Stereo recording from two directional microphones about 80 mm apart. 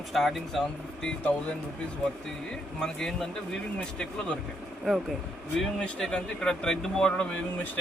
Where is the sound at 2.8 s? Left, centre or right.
Centre.